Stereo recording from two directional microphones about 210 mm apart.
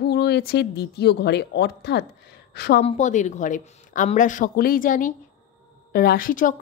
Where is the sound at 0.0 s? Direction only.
50° left (ahead or behind).